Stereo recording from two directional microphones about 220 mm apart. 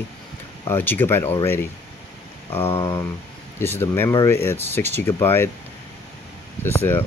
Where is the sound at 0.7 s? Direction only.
10° left (ahead or behind).